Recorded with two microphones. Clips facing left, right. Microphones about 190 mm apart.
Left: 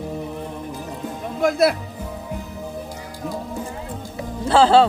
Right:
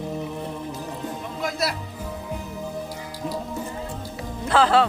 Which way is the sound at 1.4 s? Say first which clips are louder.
Left 10 dB; 55° left (ahead or behind).